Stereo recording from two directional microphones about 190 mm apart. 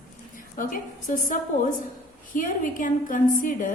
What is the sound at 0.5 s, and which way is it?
A woman's voice, 45° left (ahead or behind).